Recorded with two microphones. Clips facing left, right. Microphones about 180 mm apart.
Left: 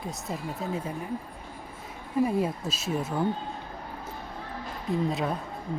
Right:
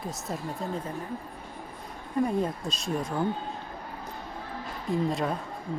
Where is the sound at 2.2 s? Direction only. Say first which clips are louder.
Left 1 dB; 5° left (ahead or behind).